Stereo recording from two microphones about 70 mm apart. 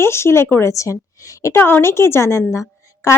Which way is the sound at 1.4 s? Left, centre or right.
Left.